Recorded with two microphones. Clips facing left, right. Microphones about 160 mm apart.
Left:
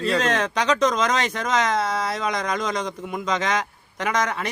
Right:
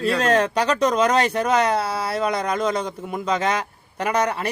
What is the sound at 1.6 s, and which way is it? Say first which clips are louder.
Speech: right 2 dB; 35° right (ahead or behind).